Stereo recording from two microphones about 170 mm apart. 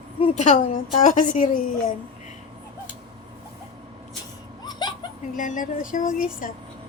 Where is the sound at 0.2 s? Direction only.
45° left (ahead or behind).